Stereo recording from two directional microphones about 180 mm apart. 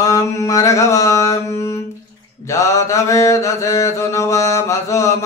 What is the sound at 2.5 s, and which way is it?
Mantra, 15° left (ahead or behind).